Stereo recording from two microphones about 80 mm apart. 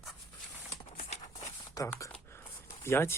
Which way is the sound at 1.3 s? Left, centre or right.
Left.